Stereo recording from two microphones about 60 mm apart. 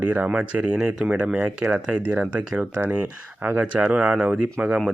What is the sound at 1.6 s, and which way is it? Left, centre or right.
Speech, right.